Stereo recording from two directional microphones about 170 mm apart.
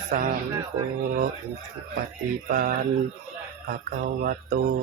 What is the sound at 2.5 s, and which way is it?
Mantra, 55° right (ahead or behind).